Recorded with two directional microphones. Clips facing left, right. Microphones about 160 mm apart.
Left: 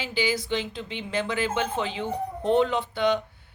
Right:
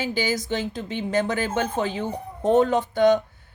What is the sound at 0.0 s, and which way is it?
A woman's voice, 45° right (ahead or behind).